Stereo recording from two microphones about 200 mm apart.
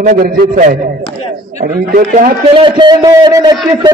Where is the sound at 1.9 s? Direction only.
40° right (ahead or behind).